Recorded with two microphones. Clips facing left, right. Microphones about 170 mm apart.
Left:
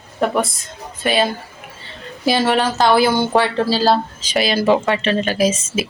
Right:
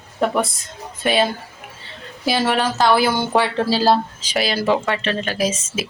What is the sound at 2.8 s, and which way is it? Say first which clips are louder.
Speech: left 2 dB; 5° right (ahead or behind).